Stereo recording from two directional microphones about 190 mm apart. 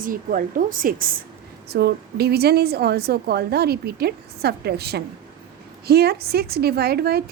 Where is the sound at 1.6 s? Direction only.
60° right (ahead or behind).